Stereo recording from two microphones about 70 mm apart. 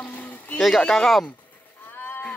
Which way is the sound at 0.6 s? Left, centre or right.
Centre.